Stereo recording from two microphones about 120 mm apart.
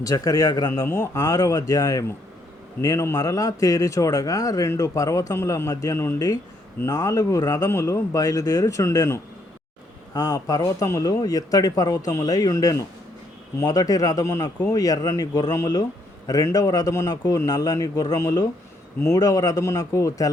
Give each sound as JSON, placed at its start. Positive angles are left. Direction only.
{"t": 0.0, "sound": "speech", "side_deg": 30}